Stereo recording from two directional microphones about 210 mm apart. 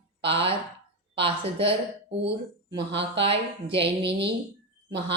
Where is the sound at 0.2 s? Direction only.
25° right (ahead or behind).